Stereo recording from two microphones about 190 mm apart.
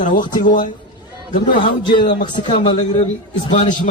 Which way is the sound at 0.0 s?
45° left (ahead or behind).